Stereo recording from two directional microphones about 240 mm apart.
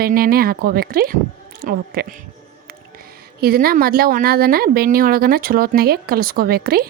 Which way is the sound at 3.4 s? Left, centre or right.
Right.